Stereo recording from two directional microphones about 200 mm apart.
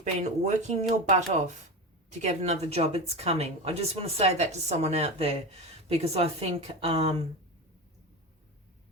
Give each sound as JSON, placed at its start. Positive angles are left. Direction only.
{"t": 0.0, "sound": "speech", "side_deg": -35}